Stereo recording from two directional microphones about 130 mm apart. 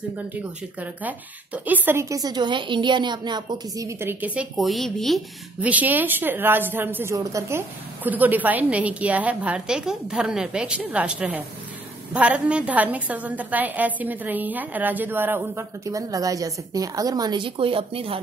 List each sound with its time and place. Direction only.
0.7 s a woman's voice: 10° right (ahead or behind)
4.6 s a woman's voice: centre (ahead or behind)
5.6 s a woman's voice: 10° right (ahead or behind); by 18.2 s 45° right (ahead or behind)